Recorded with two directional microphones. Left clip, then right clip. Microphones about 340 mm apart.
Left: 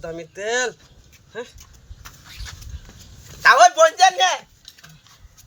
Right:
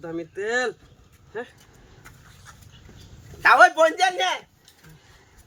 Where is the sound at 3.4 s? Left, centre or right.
Centre.